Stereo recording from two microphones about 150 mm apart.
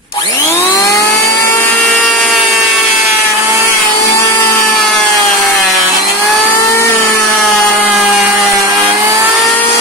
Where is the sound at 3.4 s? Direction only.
15° right (ahead or behind).